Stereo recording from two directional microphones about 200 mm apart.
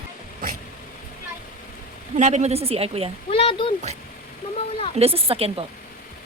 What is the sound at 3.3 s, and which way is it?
Speech, 30° left (ahead or behind).